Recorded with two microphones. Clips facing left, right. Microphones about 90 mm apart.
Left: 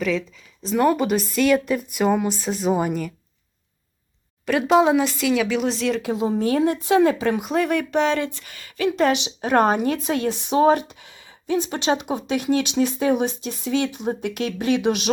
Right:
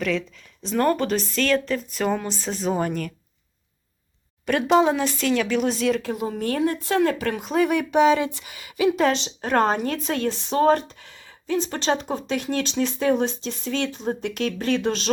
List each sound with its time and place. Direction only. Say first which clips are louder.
0.0 s speech: left 2 dB; centre (ahead or behind)
4.4 s speech: left 2 dB; centre (ahead or behind)
6.0 s speech: left 5 dB; 20° left (ahead or behind)
7.5 s a woman's voice: right 4 dB; 5° right (ahead or behind)
9.1 s speech: left 2 dB; 15° left (ahead or behind)